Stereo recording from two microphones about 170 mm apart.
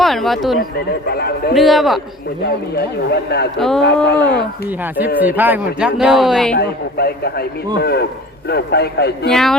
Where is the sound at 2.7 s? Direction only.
75° left (ahead or behind).